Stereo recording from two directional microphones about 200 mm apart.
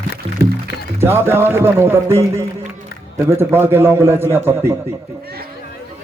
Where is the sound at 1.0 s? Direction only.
10° right (ahead or behind).